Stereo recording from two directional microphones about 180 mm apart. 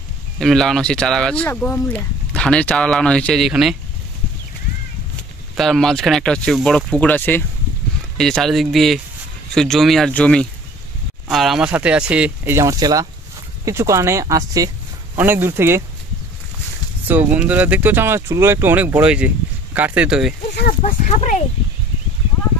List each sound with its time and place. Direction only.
0.4 s speech: centre (ahead or behind)
5.6 s speech: centre (ahead or behind); by 15.8 s 15° right (ahead or behind)
17.1 s speech: 10° right (ahead or behind)
20.8 s speech: 40° left (ahead or behind)